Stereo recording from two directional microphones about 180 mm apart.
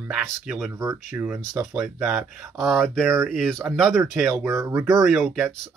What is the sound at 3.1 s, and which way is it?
Speech, 10° right (ahead or behind).